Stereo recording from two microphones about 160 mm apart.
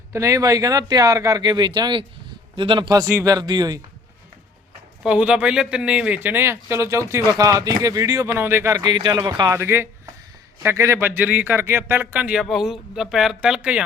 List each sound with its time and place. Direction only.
0.1 s speech: 20° right (ahead or behind)
5.0 s speech: 5° right (ahead or behind)